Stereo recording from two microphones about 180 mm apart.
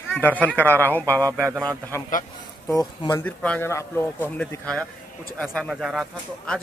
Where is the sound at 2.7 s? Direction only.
20° left (ahead or behind).